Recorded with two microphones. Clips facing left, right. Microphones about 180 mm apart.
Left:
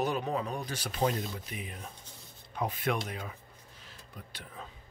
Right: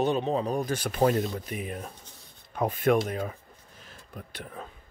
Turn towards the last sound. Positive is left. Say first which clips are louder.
# right 6 dB
turn(degrees=-55)  # may be behind; listen again after turning